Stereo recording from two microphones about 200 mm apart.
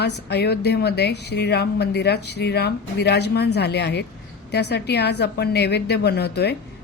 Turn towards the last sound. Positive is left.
turn(degrees=55)  # may be behind; listen again after turning